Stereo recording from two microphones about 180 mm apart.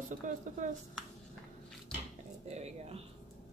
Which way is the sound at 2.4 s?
35° right (ahead or behind).